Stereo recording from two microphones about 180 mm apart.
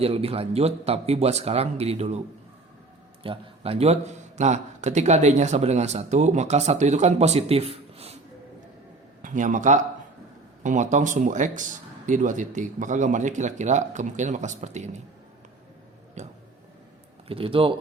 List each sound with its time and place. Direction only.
0.0 s a man's voice: 35° right (ahead or behind)
3.2 s a man's voice: 35° right (ahead or behind)
9.2 s a man's voice: 45° right (ahead or behind)
16.2 s a sound: 40° right (ahead or behind)
17.2 s speech: 30° right (ahead or behind)